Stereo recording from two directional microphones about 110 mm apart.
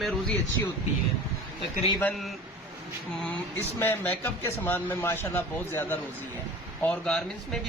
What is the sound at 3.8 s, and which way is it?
A man's voice, 20° left (ahead or behind).